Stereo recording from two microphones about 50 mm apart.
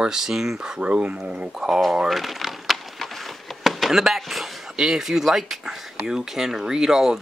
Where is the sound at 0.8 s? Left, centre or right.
Right.